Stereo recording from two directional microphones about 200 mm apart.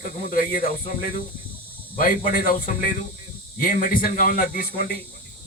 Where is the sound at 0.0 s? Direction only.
45° left (ahead or behind).